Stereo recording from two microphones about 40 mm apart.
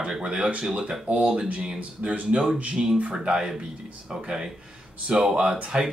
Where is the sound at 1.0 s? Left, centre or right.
Right; by 5.9 s centre.